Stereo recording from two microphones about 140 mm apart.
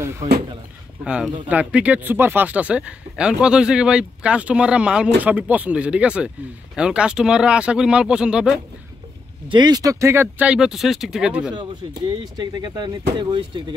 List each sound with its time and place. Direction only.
1.0 s speech: 10° right (ahead or behind)
9.5 s speech: 30° right (ahead or behind); by 11.5 s 5° right (ahead or behind)
12.4 s speech: 30° right (ahead or behind)